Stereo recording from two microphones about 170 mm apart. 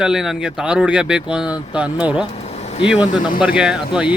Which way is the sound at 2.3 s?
40° left (ahead or behind).